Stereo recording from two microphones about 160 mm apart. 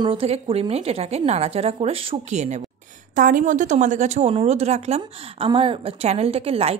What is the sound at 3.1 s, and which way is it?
A woman's voice, 55° right (ahead or behind).